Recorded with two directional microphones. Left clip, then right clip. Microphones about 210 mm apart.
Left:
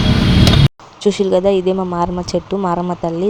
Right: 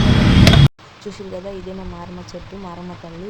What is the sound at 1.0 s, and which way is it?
Speech, 45° left (ahead or behind).